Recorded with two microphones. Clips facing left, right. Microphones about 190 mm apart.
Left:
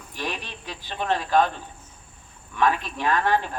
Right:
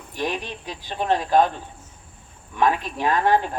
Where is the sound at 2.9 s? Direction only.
15° right (ahead or behind).